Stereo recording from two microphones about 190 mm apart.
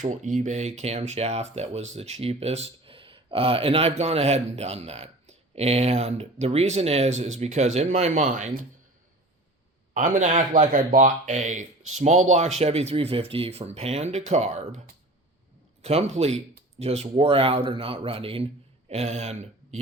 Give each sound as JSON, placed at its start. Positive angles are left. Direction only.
{"t": 0.0, "sound": "speech", "side_deg": -40}
{"t": 9.9, "sound": "speech", "side_deg": -40}
{"t": 15.8, "sound": "a man's voice", "side_deg": -35}